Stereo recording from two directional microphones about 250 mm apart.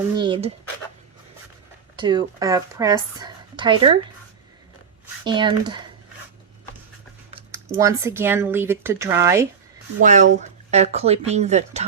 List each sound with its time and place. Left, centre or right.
0.2 s a sound: right
2.0 s speech: centre
5.2 s speech: centre
7.3 s speech: centre
10.0 s speech: right